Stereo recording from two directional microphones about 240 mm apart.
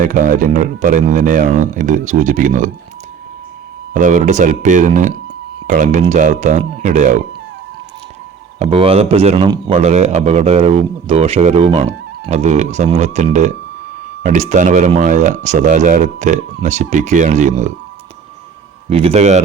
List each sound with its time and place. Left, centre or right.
0.0 s speech: right
3.9 s speech: right
8.5 s a man's voice: right
18.9 s a man's voice: right